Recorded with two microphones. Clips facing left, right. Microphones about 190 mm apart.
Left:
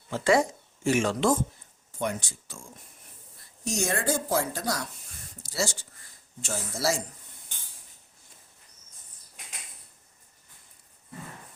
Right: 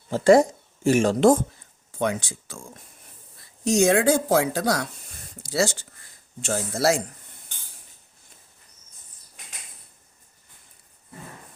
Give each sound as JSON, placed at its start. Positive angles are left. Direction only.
{"t": 0.1, "sound": "speech", "side_deg": -40}
{"t": 1.9, "sound": "speech", "side_deg": -90}
{"t": 3.7, "sound": "speech", "side_deg": -75}